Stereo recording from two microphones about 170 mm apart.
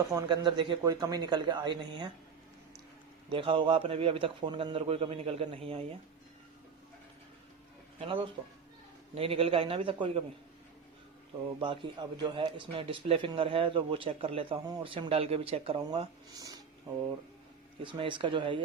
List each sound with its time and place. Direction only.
0.1 s a man's voice: 25° right (ahead or behind)
3.2 s a man's voice: 30° right (ahead or behind)
7.9 s a man's voice: 30° right (ahead or behind)
11.6 s a man's voice: 30° right (ahead or behind)
15.9 s a man's voice: 20° right (ahead or behind)
17.8 s a man's voice: 30° right (ahead or behind)